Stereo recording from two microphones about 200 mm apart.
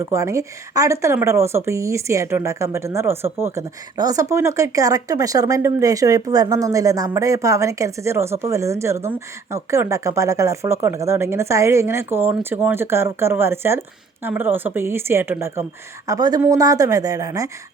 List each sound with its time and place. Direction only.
0.1 s speech: 15° right (ahead or behind)